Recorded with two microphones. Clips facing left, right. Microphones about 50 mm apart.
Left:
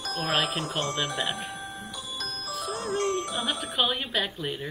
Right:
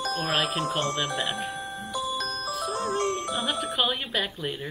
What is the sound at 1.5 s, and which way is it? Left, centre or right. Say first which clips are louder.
Music: right 5 dB; right.